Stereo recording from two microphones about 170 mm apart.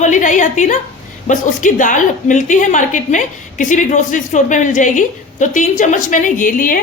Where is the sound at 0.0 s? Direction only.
45° left (ahead or behind).